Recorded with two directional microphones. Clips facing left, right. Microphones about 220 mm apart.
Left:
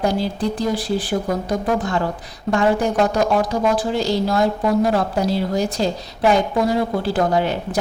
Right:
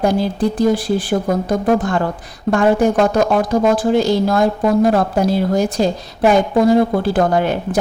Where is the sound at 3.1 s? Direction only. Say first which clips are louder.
Right 4 dB; 50° right (ahead or behind).